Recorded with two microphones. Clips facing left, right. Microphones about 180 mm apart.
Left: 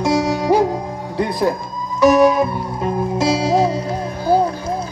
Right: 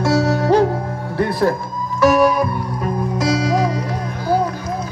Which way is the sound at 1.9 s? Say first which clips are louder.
Left 2 dB; 20° left (ahead or behind).